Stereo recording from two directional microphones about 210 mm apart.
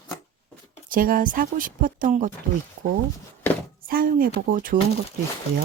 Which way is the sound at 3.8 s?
45° right (ahead or behind).